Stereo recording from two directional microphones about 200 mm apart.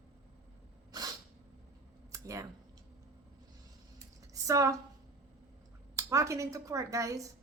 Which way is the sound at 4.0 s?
15° right (ahead or behind).